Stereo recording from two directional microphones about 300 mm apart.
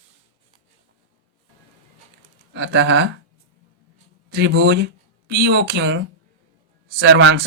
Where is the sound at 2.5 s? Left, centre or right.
Right.